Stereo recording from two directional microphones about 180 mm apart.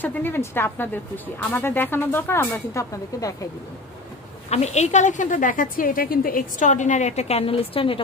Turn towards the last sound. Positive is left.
turn(degrees=30)  # may be behind; listen again after turning